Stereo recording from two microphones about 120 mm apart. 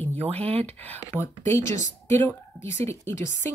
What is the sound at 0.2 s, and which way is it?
Speech, 60° right (ahead or behind).